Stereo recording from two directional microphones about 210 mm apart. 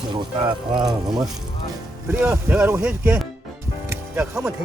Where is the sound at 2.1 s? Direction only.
10° right (ahead or behind).